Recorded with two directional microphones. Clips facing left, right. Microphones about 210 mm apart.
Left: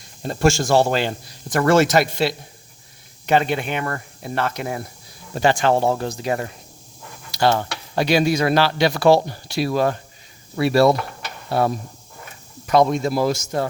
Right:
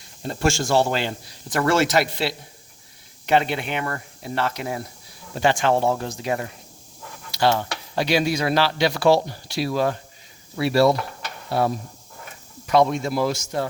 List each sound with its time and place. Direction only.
0.3 s speech: 40° left (ahead or behind)
5.4 s speech: 40° left (ahead or behind)
7.3 s cutlery: 45° left (ahead or behind)
7.9 s speech: 50° left (ahead or behind)
12.6 s speech: 40° left (ahead or behind)